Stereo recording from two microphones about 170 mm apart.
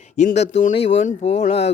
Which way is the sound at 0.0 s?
45° left (ahead or behind).